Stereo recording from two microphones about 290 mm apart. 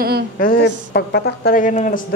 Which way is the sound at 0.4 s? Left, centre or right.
Left.